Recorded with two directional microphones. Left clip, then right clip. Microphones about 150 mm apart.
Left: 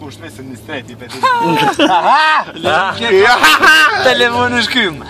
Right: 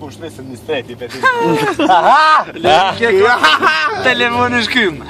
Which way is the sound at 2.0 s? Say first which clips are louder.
Right 1 dB; 25° right (ahead or behind).